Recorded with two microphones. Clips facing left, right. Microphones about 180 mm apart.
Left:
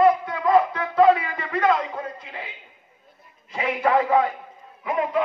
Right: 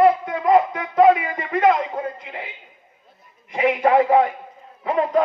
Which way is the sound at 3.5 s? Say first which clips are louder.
Right 4 dB; 25° right (ahead or behind).